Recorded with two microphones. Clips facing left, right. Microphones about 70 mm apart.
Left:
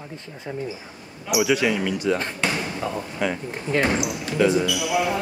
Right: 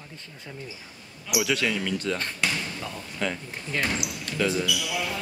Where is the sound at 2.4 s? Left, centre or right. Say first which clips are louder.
Left 4 dB; left.